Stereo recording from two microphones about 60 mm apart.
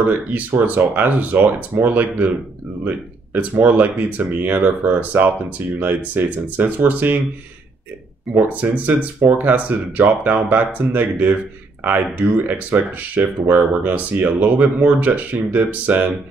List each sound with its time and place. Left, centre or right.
0.0 s speech: right
3.5 s speech: right
8.4 s speech: right